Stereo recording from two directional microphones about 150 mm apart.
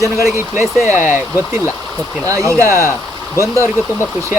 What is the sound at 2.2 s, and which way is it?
Speech, 20° right (ahead or behind).